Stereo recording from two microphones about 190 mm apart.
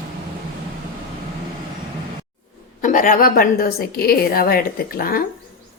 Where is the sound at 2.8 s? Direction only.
45° left (ahead or behind).